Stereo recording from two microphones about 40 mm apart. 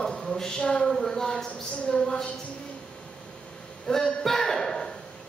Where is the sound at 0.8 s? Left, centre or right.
Centre.